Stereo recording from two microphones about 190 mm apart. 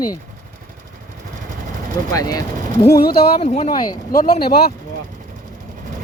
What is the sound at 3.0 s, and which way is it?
Speech, 55° left (ahead or behind).